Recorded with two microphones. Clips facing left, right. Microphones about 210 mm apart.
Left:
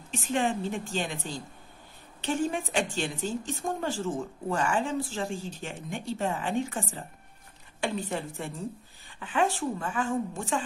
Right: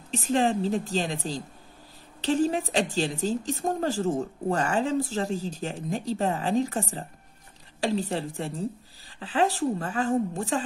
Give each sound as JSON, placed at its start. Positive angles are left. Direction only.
{"t": 0.1, "sound": "a woman's voice", "side_deg": -35}